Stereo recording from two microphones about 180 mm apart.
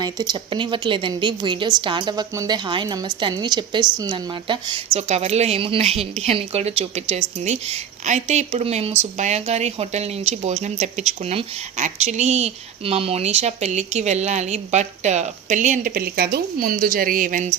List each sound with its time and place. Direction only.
0.0 s a woman's voice: 20° right (ahead or behind)
4.9 s speech: 35° right (ahead or behind)